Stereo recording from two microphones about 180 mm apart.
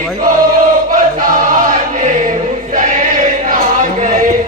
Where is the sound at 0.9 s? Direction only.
50° right (ahead or behind).